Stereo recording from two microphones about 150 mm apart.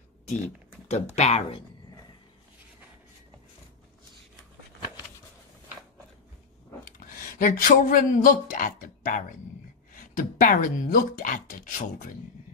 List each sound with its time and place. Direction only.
0.8 s speech: 45° left (ahead or behind)
6.8 s speech: 70° left (ahead or behind)